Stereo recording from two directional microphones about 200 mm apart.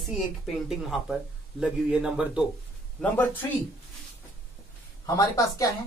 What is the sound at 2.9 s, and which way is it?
Speech, 5° left (ahead or behind).